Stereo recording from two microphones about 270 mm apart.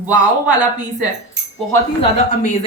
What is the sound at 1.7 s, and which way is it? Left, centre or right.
Speech, left.